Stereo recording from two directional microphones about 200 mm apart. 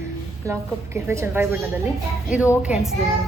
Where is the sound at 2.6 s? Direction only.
5° right (ahead or behind).